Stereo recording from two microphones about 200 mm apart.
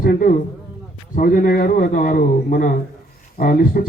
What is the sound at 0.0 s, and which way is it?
A man's voice, 45° left (ahead or behind).